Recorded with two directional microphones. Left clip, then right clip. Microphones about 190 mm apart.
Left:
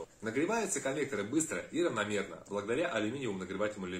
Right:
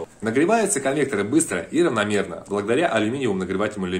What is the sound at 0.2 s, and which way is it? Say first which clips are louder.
Speech: right 14 dB; 55° right (ahead or behind).